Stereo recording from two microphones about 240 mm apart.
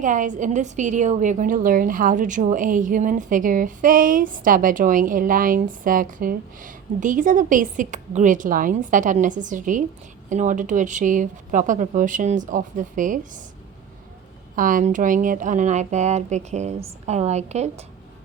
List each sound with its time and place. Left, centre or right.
0.0 s a woman's voice: right
14.5 s speech: right